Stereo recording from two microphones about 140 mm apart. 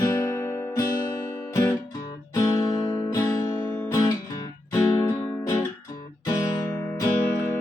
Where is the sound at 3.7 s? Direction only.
15° left (ahead or behind).